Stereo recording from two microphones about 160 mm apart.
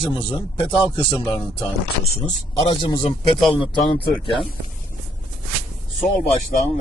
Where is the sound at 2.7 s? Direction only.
30° left (ahead or behind).